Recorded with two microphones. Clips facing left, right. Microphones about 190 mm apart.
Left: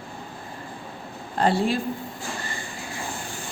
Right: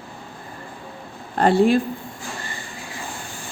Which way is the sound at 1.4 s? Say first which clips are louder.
Right 6 dB; 55° right (ahead or behind).